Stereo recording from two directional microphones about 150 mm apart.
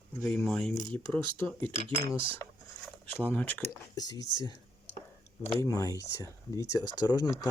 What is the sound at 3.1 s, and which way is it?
Speech, 15° left (ahead or behind).